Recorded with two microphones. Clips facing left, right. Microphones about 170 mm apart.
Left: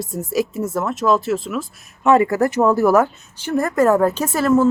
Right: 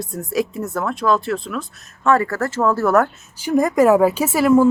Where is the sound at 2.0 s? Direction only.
20° left (ahead or behind).